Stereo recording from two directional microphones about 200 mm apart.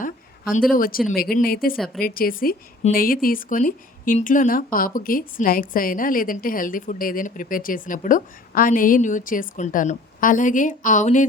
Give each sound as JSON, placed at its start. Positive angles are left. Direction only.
{"t": 0.5, "sound": "a woman's voice", "side_deg": 45}
{"t": 1.7, "sound": "a woman's voice", "side_deg": 0}
{"t": 2.0, "sound": "a woman's voice", "side_deg": 50}